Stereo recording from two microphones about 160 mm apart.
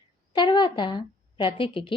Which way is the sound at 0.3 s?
30° left (ahead or behind).